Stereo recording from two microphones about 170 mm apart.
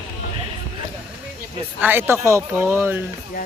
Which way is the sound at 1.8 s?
10° right (ahead or behind).